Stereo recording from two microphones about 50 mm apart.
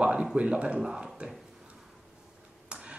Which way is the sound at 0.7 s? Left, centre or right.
Centre.